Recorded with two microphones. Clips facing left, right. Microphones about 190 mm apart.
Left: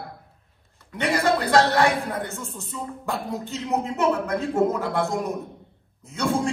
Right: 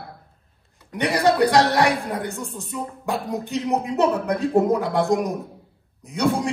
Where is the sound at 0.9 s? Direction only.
15° right (ahead or behind).